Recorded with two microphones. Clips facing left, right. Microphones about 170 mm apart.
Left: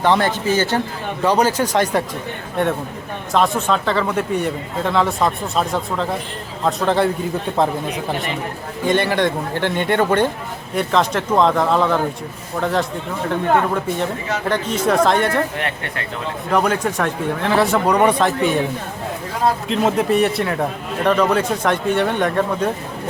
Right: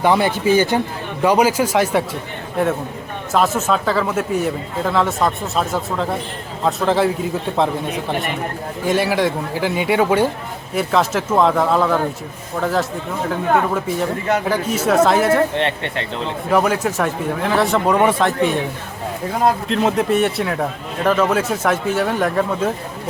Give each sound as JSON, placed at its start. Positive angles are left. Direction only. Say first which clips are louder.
{"t": 0.0, "sound": "a man's voice", "louder": "right 1 dB", "side_deg": -10}
{"t": 3.3, "sound": "a man's voice", "louder": "even", "side_deg": -5}
{"t": 8.8, "sound": "a man's voice", "louder": "even", "side_deg": -5}
{"t": 15.5, "sound": "speech", "louder": "right 5 dB", "side_deg": -25}
{"t": 16.5, "sound": "a man's voice", "louder": "right 1 dB", "side_deg": -5}
{"t": 19.6, "sound": "a man's voice", "louder": "even", "side_deg": 0}